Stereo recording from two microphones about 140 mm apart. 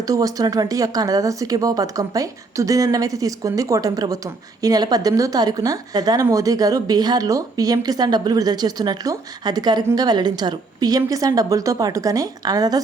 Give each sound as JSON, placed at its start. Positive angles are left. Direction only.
{"t": 0.1, "sound": "speech", "side_deg": -25}